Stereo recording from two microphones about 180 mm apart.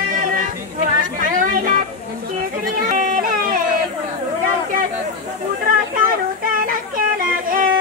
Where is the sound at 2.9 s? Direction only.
45° right (ahead or behind).